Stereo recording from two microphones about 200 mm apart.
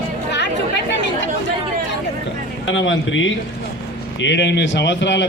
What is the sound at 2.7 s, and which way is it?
A man's voice, 70° left (ahead or behind).